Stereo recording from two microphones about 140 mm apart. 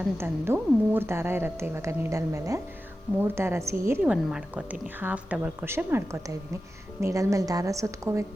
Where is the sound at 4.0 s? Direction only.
5° right (ahead or behind).